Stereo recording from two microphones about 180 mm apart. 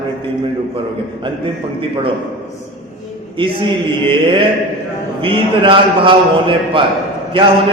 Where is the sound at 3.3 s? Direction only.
30° right (ahead or behind).